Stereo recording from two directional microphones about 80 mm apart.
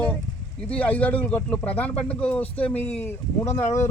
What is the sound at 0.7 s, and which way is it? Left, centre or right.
Speech, centre.